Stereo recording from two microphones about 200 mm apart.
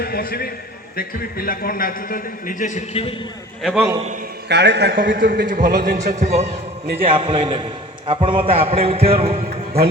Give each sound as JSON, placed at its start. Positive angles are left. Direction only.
{"t": 0.0, "sound": "a man's voice", "side_deg": 50}
{"t": 3.6, "sound": "a man's voice", "side_deg": 0}
{"t": 4.4, "sound": "a man's voice", "side_deg": -60}
{"t": 6.0, "sound": "a man's voice", "side_deg": -35}